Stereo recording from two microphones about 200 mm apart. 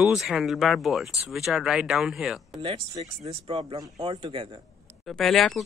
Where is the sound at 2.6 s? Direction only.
25° right (ahead or behind).